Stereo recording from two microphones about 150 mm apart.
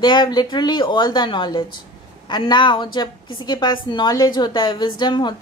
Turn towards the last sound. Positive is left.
turn(degrees=30)  # may be behind; listen again after turning